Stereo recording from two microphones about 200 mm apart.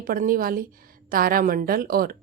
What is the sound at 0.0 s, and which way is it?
A woman's voice, 45° right (ahead or behind).